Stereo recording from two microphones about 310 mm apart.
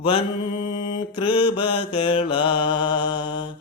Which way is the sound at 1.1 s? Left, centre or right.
Centre.